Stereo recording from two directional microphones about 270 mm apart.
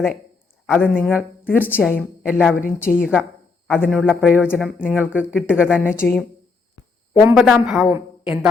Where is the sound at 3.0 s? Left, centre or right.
Centre.